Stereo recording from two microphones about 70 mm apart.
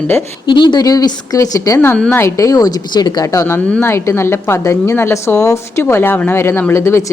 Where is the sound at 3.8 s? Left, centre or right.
Left.